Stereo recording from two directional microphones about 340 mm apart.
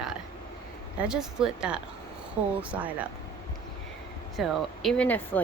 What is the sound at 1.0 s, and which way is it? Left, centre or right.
Speech, centre.